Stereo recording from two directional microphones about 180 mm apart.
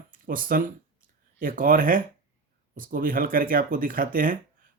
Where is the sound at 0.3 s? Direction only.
50° right (ahead or behind).